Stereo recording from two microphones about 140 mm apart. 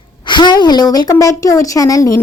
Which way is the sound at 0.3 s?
35° left (ahead or behind).